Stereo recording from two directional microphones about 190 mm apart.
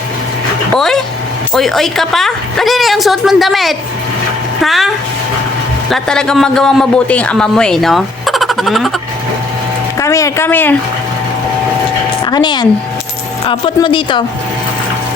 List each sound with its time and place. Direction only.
0.7 s a man's voice: centre (ahead or behind)
5.9 s a man's voice: 5° left (ahead or behind)
10.0 s speech: 15° left (ahead or behind)
12.2 s a woman's voice: 20° left (ahead or behind)
13.7 s speech: 25° left (ahead or behind)